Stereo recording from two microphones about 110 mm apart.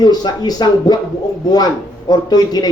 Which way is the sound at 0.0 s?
40° left (ahead or behind).